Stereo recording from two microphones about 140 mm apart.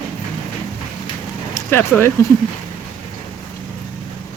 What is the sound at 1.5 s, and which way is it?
Speech, 15° left (ahead or behind).